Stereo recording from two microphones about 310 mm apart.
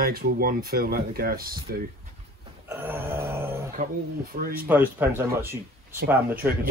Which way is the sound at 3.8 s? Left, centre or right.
Right.